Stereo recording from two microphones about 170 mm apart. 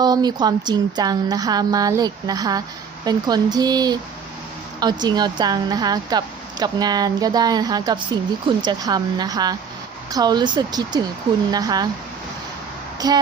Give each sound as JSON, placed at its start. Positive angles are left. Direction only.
{"t": 0.0, "sound": "speech", "side_deg": -25}
{"t": 13.0, "sound": "speech", "side_deg": -25}